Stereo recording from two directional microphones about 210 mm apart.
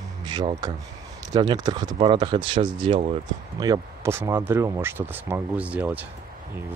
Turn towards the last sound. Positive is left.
turn(degrees=-5)  # may be behind; listen again after turning